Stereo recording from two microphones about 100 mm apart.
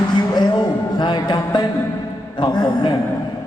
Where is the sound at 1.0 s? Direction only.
50° left (ahead or behind).